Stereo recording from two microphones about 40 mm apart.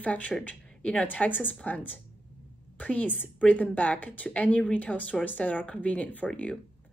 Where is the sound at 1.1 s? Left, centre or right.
Left.